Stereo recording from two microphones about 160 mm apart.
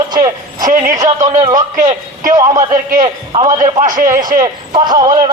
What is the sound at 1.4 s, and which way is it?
A man's voice, 25° right (ahead or behind).